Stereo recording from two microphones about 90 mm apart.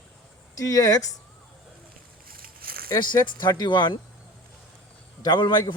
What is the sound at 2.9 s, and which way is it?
Speech, 45° left (ahead or behind).